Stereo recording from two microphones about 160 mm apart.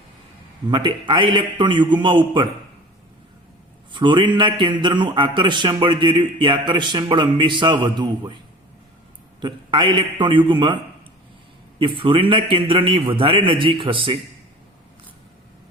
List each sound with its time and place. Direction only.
0.7 s a man's voice: 30° right (ahead or behind)
3.9 s a man's voice: 30° right (ahead or behind)
9.4 s a man's voice: 30° right (ahead or behind)
11.8 s a man's voice: 30° right (ahead or behind)